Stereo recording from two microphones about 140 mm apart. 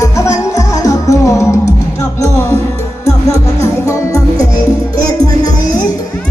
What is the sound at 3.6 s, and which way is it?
Music, 20° left (ahead or behind).